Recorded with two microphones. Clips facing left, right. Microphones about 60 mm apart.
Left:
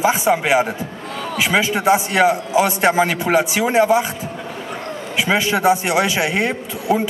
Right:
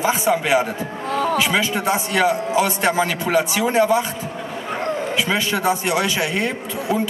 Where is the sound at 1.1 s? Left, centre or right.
Right.